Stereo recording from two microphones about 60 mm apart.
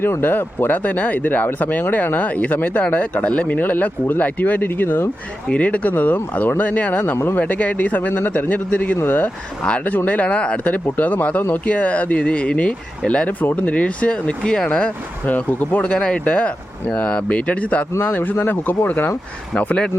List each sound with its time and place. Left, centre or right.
0.0 s speech: left
5.5 s speech: left
7.0 s speech: left
7.3 s speech: left
9.6 s speech: centre
15.3 s speech: left
15.8 s speech: centre; by 19.1 s left
19.5 s speech: centre